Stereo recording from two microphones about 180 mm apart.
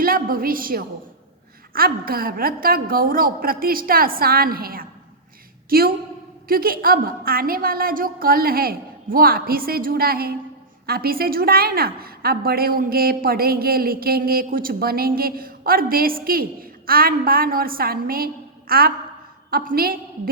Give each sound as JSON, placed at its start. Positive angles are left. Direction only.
{"t": 0.0, "sound": "a woman's voice", "side_deg": -55}